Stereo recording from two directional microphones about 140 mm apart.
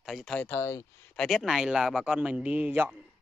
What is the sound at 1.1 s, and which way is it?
A man's voice, centre (ahead or behind).